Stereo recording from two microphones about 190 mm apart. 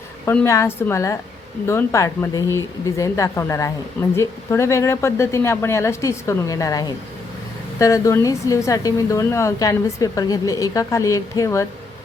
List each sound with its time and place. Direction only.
0.3 s a woman's voice: 15° left (ahead or behind)